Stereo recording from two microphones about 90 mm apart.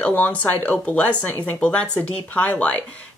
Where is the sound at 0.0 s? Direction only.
20° left (ahead or behind).